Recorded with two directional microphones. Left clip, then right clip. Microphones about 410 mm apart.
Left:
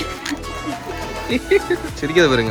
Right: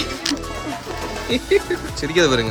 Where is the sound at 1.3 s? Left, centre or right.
Centre.